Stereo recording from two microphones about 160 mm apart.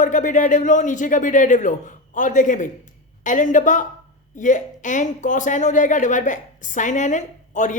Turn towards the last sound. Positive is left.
turn(degrees=50)  # may be behind; listen again after turning